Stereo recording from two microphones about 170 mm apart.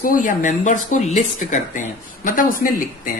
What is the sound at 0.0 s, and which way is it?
Speech, 50° left (ahead or behind).